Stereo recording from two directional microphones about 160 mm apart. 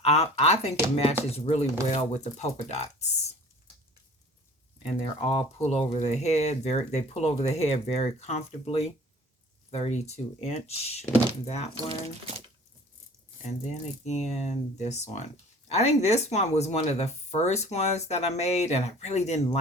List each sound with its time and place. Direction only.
0.0 s speech: 40° left (ahead or behind)
5.0 s speech: 35° left (ahead or behind)
13.4 s speech: 45° left (ahead or behind)